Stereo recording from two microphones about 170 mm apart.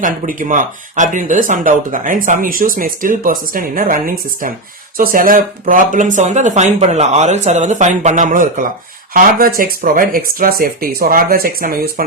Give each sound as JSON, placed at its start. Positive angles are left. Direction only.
{"t": 0.0, "sound": "speech", "side_deg": -50}